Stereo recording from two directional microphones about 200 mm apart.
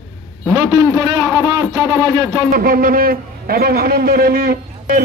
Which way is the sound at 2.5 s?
45° right (ahead or behind).